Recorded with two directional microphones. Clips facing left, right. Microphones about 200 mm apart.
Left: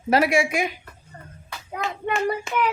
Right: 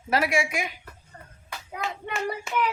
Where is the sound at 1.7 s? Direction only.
55° left (ahead or behind).